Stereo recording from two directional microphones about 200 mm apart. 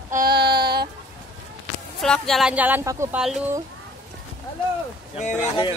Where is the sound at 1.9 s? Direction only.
Centre (ahead or behind).